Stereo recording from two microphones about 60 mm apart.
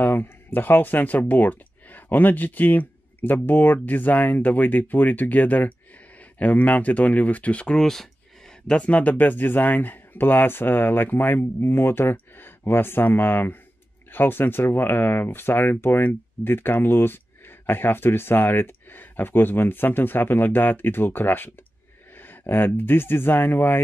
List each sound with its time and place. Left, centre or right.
0.0 s speech: left; by 8.1 s centre
8.6 s speech: left
22.2 s a sound: left
22.8 s speech: left